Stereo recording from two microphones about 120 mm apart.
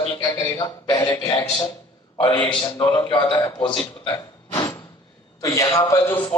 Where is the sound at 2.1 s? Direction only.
45° left (ahead or behind); by 6.1 s 25° left (ahead or behind).